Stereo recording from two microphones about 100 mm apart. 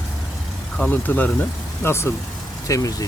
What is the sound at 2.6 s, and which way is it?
Speech, 35° left (ahead or behind).